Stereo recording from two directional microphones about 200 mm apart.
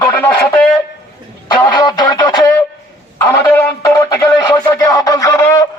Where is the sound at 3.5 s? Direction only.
10° left (ahead or behind).